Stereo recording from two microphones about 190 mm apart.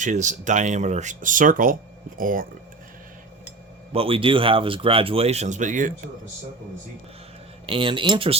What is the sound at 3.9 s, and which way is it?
Speech, 30° right (ahead or behind).